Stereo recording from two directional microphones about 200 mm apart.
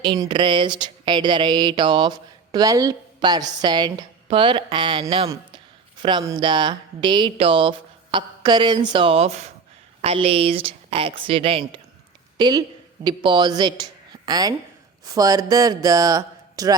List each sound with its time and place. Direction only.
0.0 s a woman's voice: 25° right (ahead or behind)